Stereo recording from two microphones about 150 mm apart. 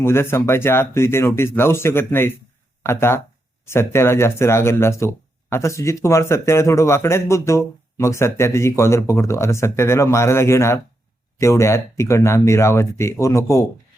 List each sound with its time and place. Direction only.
0.0 s speech: 15° left (ahead or behind)